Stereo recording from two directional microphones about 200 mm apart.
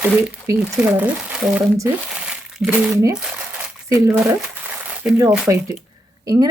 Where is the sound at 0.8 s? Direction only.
5° right (ahead or behind).